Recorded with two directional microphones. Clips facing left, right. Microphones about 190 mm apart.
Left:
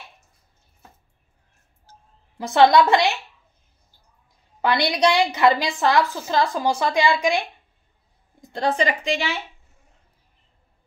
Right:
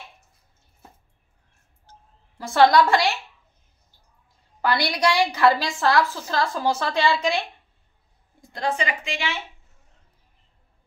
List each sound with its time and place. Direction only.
1.9 s a sound: 20° left (ahead or behind)
4.6 s a woman's voice: 20° left (ahead or behind)
8.4 s a woman's voice: 30° left (ahead or behind)